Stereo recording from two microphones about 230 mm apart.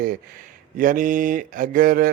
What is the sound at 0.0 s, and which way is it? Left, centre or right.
Speech, right.